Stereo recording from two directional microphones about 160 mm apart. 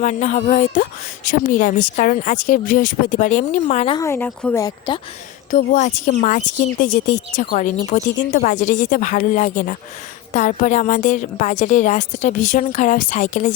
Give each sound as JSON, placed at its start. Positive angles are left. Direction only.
{"t": 0.0, "sound": "a woman's voice", "side_deg": 50}
{"t": 3.9, "sound": "a woman's voice", "side_deg": 15}
{"t": 4.9, "sound": "speech", "side_deg": 30}
{"t": 5.5, "sound": "a woman's voice", "side_deg": 55}